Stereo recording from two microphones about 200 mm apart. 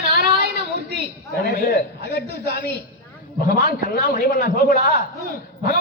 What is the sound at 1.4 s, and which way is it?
A man's voice, 55° left (ahead or behind).